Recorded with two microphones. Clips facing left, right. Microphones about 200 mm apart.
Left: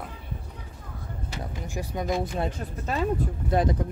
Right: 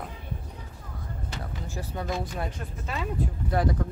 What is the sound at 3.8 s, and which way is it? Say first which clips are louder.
Speech: left 1 dB; 20° left (ahead or behind).